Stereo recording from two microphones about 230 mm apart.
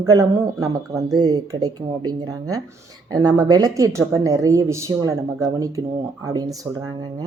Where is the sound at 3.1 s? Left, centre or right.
Centre.